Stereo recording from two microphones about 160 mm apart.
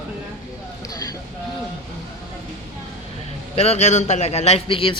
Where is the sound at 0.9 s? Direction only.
25° left (ahead or behind).